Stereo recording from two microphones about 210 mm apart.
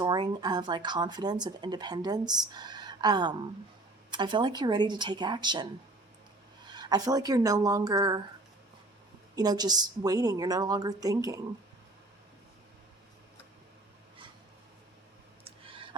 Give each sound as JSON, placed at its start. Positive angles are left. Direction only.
{"t": 0.0, "sound": "speech", "side_deg": -20}
{"t": 6.7, "sound": "speech", "side_deg": -20}
{"t": 9.3, "sound": "a woman's voice", "side_deg": -20}
{"t": 15.4, "sound": "clicking", "side_deg": -25}